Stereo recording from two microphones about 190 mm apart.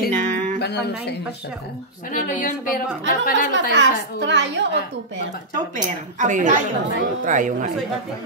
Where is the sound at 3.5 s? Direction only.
70° right (ahead or behind).